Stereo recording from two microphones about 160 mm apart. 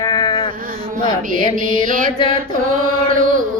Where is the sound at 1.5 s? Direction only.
60° right (ahead or behind).